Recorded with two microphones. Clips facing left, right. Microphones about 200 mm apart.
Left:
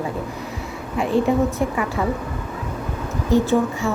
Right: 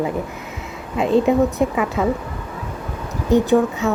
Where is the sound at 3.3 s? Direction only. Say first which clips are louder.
Right 3 dB; 20° right (ahead or behind).